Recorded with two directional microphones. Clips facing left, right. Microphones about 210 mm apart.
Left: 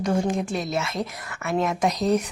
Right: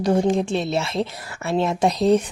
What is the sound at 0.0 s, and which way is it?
A woman's voice, 30° right (ahead or behind).